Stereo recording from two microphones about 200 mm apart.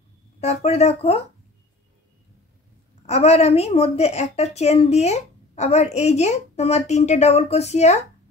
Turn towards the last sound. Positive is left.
turn(degrees=35)  # may be behind; listen again after turning